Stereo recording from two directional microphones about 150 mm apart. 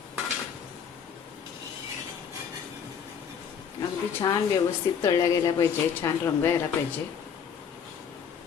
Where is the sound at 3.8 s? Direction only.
25° left (ahead or behind).